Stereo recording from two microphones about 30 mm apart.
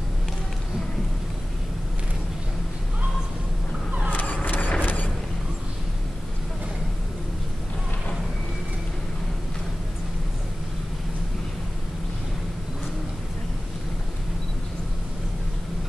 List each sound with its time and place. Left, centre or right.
4.1 s vehicle: left
4.5 s mechanisms: left